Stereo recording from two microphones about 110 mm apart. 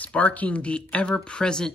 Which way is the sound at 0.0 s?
10° left (ahead or behind).